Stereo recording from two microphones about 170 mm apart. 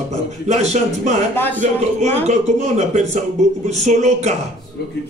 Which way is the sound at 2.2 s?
40° right (ahead or behind).